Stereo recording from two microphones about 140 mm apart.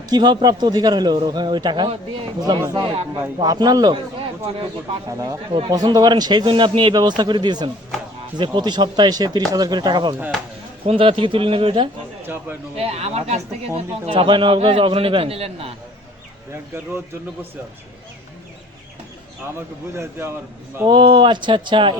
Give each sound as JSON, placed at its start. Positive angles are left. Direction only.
{"t": 0.1, "sound": "a man's voice", "side_deg": -30}
{"t": 5.0, "sound": "a man's voice", "side_deg": -25}
{"t": 5.5, "sound": "a man's voice", "side_deg": -35}
{"t": 19.5, "sound": "speech", "side_deg": -15}
{"t": 20.8, "sound": "a man's voice", "side_deg": -35}